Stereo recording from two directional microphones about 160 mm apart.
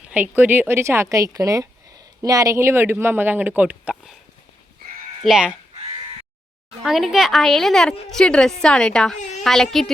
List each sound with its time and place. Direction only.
0.1 s speech: 10° right (ahead or behind)
5.2 s a woman's voice: 5° right (ahead or behind)
6.8 s a woman's voice: centre (ahead or behind)